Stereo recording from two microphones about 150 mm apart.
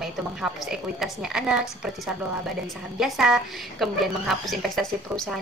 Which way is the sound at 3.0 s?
5° right (ahead or behind).